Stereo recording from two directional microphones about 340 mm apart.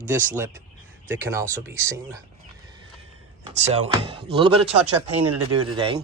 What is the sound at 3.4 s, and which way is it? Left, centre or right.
Speech, centre.